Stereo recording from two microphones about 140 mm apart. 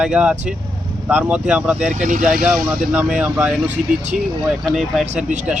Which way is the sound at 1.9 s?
65° right (ahead or behind).